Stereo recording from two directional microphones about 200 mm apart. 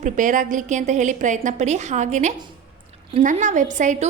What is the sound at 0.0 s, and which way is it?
A woman's voice, 40° right (ahead or behind).